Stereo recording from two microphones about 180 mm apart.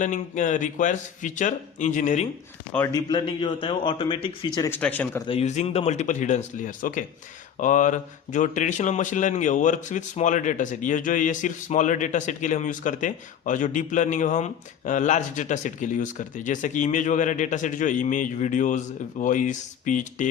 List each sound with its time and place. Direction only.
0.0 s a man's voice: 45° left (ahead or behind)
2.7 s speech: 15° left (ahead or behind)
3.1 s a man's voice: 25° left (ahead or behind)
4.7 s speech: 10° left (ahead or behind)
5.2 s a man's voice: 35° left (ahead or behind)